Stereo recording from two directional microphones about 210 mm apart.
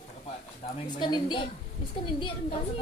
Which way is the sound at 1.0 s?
20° left (ahead or behind).